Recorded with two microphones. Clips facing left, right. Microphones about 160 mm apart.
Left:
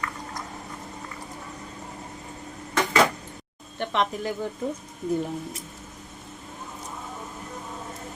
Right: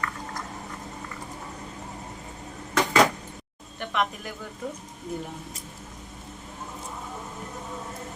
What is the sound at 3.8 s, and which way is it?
Speech, 30° left (ahead or behind).